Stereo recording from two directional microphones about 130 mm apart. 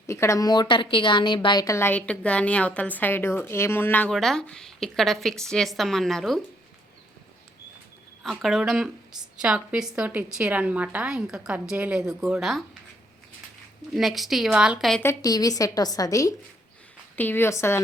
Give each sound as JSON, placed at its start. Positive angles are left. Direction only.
{"t": 0.1, "sound": "a woman's voice", "side_deg": 25}
{"t": 4.1, "sound": "a woman's voice", "side_deg": 5}
{"t": 8.2, "sound": "a woman's voice", "side_deg": 0}
{"t": 13.9, "sound": "a woman's voice", "side_deg": 0}
{"t": 15.0, "sound": "a woman's voice", "side_deg": 30}
{"t": 17.2, "sound": "a woman's voice", "side_deg": 15}